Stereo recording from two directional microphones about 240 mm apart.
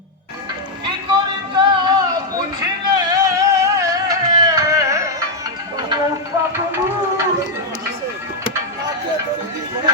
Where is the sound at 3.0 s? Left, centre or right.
Centre.